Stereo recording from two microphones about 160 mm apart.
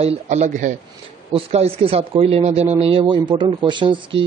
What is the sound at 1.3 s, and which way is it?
Speech, 40° right (ahead or behind).